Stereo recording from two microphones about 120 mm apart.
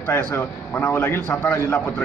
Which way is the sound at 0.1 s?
20° left (ahead or behind).